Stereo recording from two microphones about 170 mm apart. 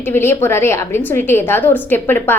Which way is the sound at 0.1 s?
15° left (ahead or behind).